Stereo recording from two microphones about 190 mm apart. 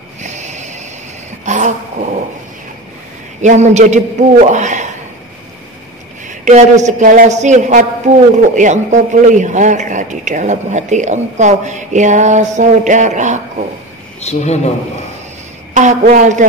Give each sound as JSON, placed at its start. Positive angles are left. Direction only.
{"t": 0.2, "sound": "a sound", "side_deg": -40}
{"t": 3.3, "sound": "a man's voice", "side_deg": -40}
{"t": 6.2, "sound": "a man's voice", "side_deg": -40}
{"t": 14.2, "sound": "speech", "side_deg": 35}
{"t": 15.7, "sound": "a man's voice", "side_deg": -40}